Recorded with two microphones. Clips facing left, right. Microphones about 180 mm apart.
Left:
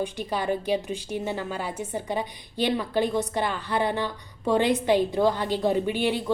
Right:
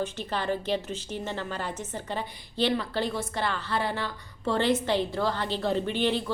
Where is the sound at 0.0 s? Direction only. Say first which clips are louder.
Left 3 dB; 10° left (ahead or behind).